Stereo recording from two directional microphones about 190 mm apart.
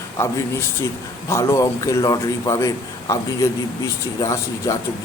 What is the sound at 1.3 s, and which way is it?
A man's voice, 15° left (ahead or behind).